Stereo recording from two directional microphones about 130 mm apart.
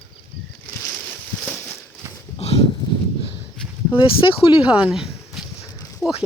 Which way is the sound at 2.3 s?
50° left (ahead or behind).